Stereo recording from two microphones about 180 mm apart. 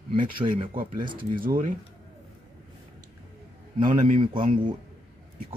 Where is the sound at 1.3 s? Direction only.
50° right (ahead or behind).